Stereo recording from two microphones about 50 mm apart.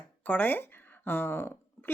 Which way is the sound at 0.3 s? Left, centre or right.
Left.